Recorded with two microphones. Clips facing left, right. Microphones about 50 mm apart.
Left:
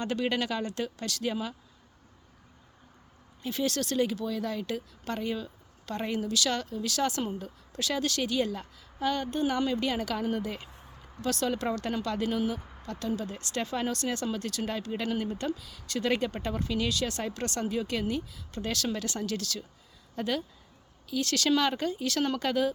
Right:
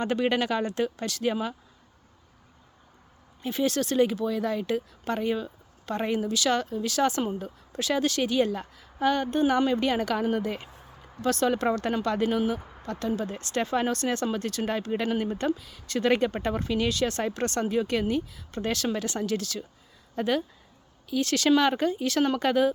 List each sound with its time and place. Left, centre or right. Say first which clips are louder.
0.0 s speech: right 4 dB; right
3.4 s speech: right 4 dB; right